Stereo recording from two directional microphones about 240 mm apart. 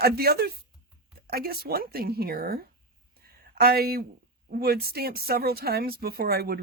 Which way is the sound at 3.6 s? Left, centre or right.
Right.